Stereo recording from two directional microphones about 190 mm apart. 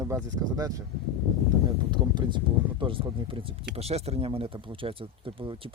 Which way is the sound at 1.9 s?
25° right (ahead or behind).